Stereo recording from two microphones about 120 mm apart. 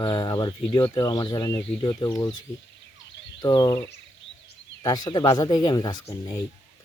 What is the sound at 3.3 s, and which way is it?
Speech, 35° left (ahead or behind).